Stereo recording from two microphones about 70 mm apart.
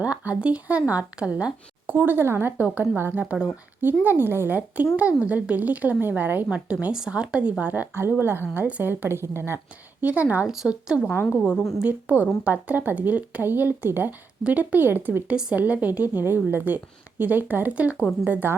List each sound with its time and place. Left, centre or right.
0.0 s a woman's voice: centre
1.9 s a woman's voice: right
2.6 s a woman's voice: right
6.7 s speech: centre
7.6 s a woman's voice: right
10.0 s a woman's voice: right
10.5 s speech: centre
11.8 s a woman's voice: right
15.3 s a woman's voice: centre